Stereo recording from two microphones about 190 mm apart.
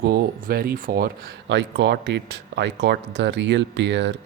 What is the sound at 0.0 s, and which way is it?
Speech, 55° right (ahead or behind).